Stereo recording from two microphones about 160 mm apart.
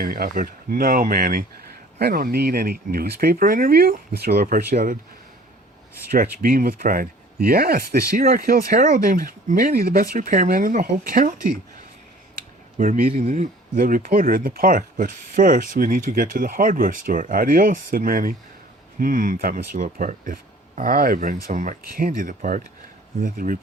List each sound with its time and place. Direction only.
0.0 s speech: 65° right (ahead or behind)
2.0 s speech: 70° right (ahead or behind)
6.1 s speech: 60° right (ahead or behind)
12.7 s speech: 50° right (ahead or behind)